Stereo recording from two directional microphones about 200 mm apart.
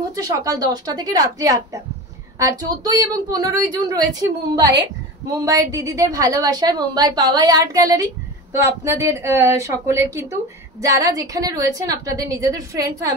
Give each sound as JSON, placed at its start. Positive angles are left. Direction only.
{"t": 0.1, "sound": "a woman's voice", "side_deg": -15}